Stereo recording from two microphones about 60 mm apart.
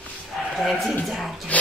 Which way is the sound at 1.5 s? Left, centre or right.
Left.